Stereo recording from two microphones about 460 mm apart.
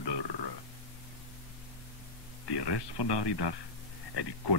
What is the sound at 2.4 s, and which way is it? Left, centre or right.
A man's voice, left.